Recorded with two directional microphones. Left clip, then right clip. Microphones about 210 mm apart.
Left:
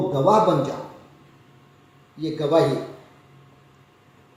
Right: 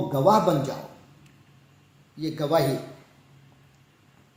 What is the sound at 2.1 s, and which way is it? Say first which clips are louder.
Speech: left 3 dB; 35° right (ahead or behind).